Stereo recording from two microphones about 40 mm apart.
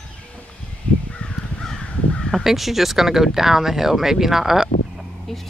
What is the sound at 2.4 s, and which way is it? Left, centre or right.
Speech, centre.